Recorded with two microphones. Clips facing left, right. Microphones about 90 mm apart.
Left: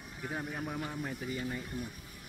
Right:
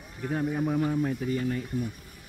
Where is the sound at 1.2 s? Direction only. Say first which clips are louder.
Right 8 dB; 10° left (ahead or behind).